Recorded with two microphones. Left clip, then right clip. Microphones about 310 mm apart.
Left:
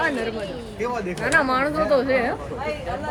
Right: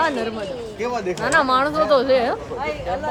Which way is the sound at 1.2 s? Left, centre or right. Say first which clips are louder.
Right 2 dB; centre.